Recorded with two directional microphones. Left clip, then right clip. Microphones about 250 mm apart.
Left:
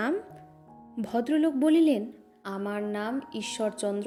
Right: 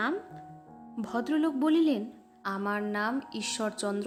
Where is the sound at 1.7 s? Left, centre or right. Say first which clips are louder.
Left 3 dB; right.